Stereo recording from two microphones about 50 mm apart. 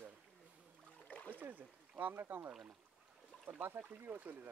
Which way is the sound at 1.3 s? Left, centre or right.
Right.